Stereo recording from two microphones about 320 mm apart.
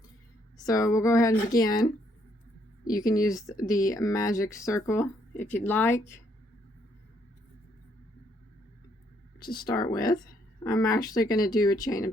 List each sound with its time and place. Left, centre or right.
0.6 s speech: centre
2.8 s a woman's voice: left
3.1 s speech: centre
9.4 s speech: centre